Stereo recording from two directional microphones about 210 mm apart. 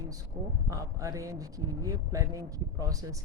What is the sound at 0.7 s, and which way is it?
Speech, 15° right (ahead or behind).